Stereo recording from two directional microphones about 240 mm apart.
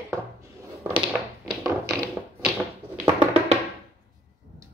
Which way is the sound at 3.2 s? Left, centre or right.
Right.